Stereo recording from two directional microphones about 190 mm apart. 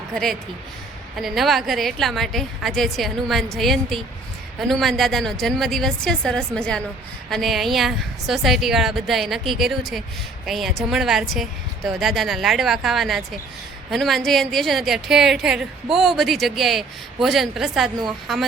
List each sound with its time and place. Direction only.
1.2 s a woman's voice: centre (ahead or behind)